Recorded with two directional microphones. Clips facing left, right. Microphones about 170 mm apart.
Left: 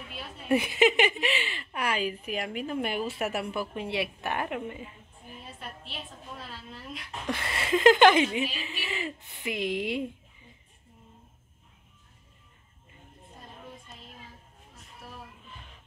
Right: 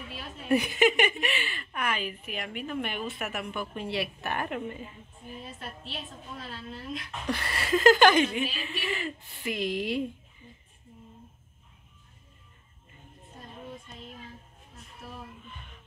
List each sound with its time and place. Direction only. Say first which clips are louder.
0.5 s a woman's voice: even; 25° left (ahead or behind)
7.2 s speech: even; 25° left (ahead or behind)
15.5 s music: right 1 dB; 30° left (ahead or behind)